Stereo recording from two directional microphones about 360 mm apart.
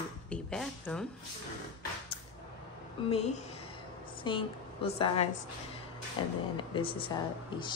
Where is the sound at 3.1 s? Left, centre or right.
Centre.